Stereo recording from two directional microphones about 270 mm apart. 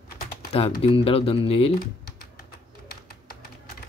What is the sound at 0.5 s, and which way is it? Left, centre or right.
Speech, left.